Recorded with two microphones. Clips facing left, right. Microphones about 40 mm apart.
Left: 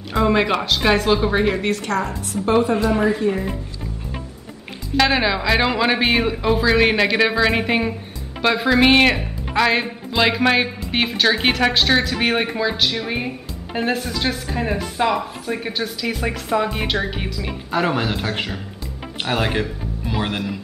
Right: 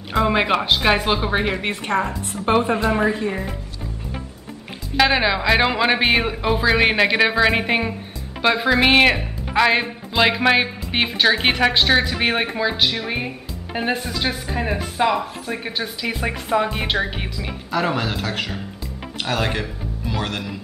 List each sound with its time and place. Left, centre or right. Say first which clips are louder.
0.1 s speech: even; centre
4.9 s speech: even; centre
17.6 s a man's voice: left 1 dB; centre
20.1 s music: left 2 dB; centre